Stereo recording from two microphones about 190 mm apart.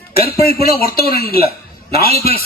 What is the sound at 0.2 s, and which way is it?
A man's voice, 55° left (ahead or behind).